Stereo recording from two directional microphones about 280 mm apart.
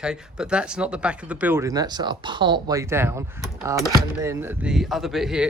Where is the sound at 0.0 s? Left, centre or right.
Centre.